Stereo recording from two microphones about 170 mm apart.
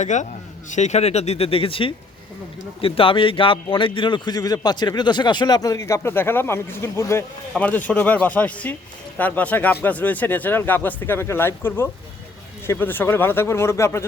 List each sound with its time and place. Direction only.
0.0 s a man's voice: 45° left (ahead or behind); by 14.0 s 15° left (ahead or behind)